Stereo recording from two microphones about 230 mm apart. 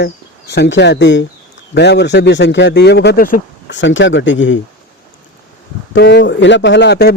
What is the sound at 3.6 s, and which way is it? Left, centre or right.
Speech, left.